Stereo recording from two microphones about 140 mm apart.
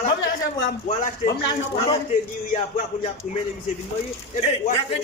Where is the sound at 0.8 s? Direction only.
55° left (ahead or behind).